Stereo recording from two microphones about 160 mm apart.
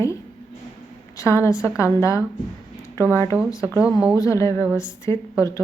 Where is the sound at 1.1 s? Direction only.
15° left (ahead or behind).